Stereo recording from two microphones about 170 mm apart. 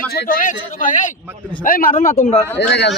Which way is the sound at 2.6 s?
90° left.